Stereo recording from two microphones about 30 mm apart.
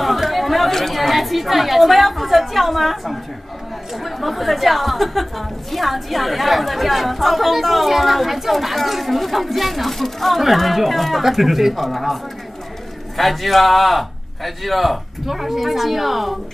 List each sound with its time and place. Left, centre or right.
0.0 s chatter: centre
0.7 s chatter: centre
0.9 s a woman's voice: centre
13.2 s a woman's voice: centre